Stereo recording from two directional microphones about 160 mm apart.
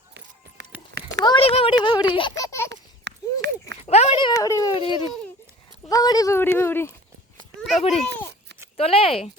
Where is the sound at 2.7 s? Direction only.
90° right.